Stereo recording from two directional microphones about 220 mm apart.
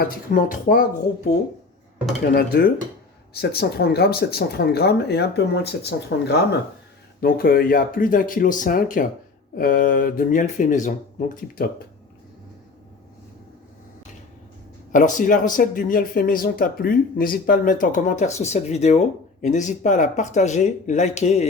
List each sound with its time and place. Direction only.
0.0 s speech: 40° left (ahead or behind)
2.3 s speech: 45° left (ahead or behind)
14.9 s speech: 35° left (ahead or behind)